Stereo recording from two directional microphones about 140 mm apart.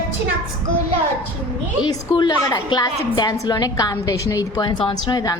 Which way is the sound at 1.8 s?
30° left (ahead or behind).